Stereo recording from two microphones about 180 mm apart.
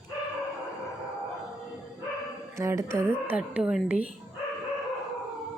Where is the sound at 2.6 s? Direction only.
15° right (ahead or behind).